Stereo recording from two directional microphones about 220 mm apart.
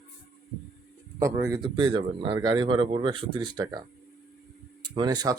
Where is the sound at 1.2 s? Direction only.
15° right (ahead or behind).